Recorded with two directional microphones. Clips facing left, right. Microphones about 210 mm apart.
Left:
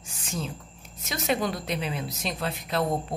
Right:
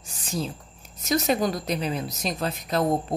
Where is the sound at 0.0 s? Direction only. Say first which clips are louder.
Right 4 dB; 35° right (ahead or behind).